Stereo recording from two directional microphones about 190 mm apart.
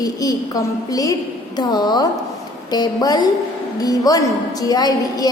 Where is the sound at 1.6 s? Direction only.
20° left (ahead or behind).